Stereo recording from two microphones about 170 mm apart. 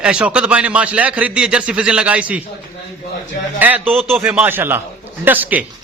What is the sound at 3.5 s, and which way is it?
A man's voice, 10° right (ahead or behind).